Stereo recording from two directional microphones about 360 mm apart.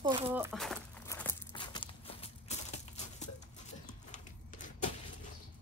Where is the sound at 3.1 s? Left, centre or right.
Centre.